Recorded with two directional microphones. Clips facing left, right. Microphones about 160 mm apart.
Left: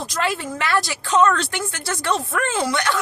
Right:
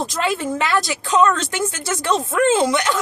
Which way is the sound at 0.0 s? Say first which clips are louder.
Right 3 dB; 20° right (ahead or behind).